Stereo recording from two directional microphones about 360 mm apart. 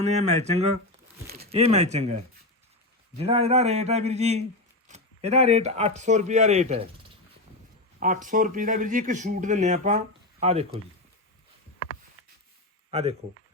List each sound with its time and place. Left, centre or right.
0.0 s speech: centre
7.9 s speech: right
12.9 s speech: centre